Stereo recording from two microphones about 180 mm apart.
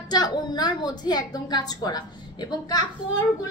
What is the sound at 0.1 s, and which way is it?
A child's voice, 25° left (ahead or behind).